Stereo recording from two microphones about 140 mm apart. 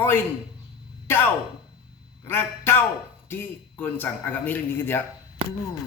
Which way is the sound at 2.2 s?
15° left (ahead or behind).